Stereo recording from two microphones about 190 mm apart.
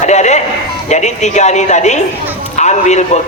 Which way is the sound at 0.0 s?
35° left (ahead or behind).